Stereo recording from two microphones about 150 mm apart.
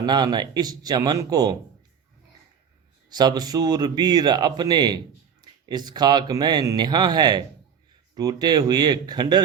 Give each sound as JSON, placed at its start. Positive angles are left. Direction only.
{"t": 0.0, "sound": "speech", "side_deg": -30}
{"t": 3.1, "sound": "speech", "side_deg": -30}